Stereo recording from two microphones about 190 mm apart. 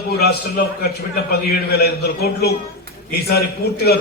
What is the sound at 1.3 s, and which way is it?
A man's voice, 55° left (ahead or behind).